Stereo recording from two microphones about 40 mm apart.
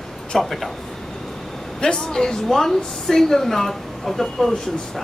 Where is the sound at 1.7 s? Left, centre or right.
Centre.